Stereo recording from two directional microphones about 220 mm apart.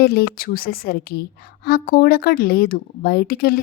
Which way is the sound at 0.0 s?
45° left (ahead or behind).